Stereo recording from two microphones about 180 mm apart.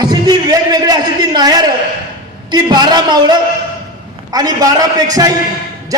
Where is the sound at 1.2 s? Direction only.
25° right (ahead or behind).